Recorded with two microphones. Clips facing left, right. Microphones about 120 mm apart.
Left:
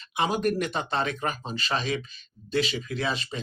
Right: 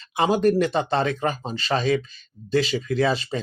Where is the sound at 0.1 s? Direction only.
30° right (ahead or behind).